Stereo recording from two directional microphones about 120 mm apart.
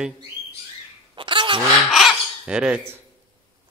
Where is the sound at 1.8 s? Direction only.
5° right (ahead or behind).